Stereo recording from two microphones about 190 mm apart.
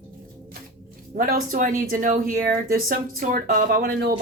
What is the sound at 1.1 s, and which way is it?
Speech, 50° right (ahead or behind).